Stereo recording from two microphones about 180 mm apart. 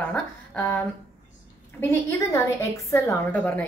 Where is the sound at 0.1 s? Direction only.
10° left (ahead or behind).